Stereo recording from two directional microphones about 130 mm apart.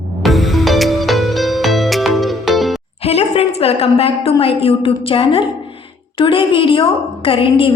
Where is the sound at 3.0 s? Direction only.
50° left (ahead or behind).